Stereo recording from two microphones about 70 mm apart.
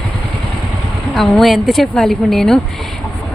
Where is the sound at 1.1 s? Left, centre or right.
Centre.